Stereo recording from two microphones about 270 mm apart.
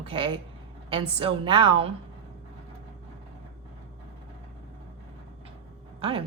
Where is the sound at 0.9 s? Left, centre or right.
Centre.